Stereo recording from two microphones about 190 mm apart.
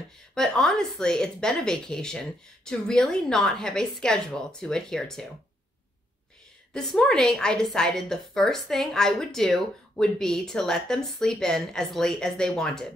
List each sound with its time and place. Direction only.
0.3 s a woman's voice: 5° left (ahead or behind)
6.7 s a woman's voice: 5° left (ahead or behind)